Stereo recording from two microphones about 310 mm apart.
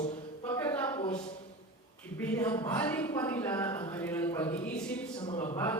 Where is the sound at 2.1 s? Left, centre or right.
Centre.